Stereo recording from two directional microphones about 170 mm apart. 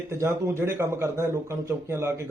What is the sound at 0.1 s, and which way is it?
A man's voice, 15° right (ahead or behind).